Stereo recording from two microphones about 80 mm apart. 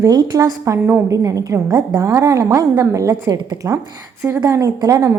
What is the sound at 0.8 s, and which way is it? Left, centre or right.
Speech, right.